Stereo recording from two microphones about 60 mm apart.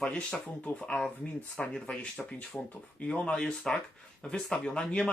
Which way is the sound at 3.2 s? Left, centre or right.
Centre.